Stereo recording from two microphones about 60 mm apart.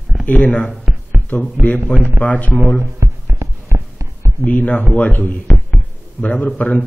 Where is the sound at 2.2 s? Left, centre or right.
Left.